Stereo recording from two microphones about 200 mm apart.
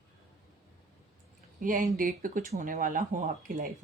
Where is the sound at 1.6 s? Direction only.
40° right (ahead or behind).